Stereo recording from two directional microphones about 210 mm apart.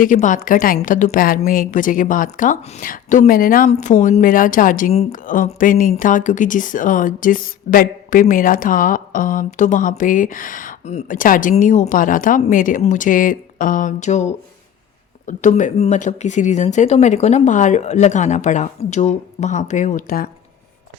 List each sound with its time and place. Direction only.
0.0 s a woman's voice: 40° left (ahead or behind)